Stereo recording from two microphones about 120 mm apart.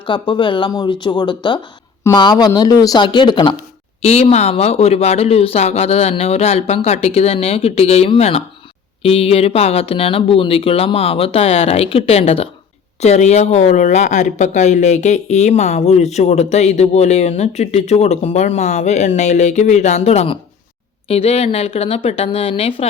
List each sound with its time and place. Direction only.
0.0 s speech: 45° left (ahead or behind)
4.0 s speech: 60° left (ahead or behind)